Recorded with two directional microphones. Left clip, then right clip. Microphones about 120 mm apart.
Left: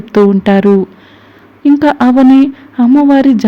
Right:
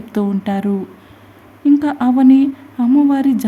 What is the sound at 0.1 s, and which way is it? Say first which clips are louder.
Speech: left 12 dB; 45° left (ahead or behind).